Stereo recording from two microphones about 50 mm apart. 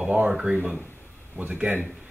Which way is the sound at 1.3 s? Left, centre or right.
Right.